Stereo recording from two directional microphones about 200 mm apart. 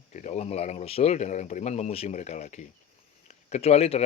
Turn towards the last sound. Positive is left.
turn(degrees=30)  # may be behind; listen again after turning